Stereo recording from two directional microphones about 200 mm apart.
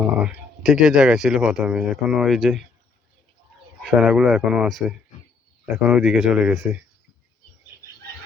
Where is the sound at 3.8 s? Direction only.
5° right (ahead or behind).